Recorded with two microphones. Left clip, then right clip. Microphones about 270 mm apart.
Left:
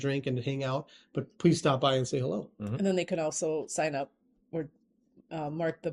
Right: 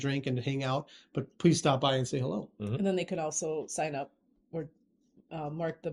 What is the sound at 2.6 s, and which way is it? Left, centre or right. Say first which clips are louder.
Speech: left 2 dB; left.